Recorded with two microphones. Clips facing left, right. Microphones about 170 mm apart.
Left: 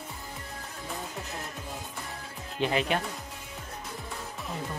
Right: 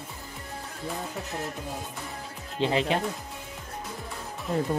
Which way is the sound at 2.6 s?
25° right (ahead or behind).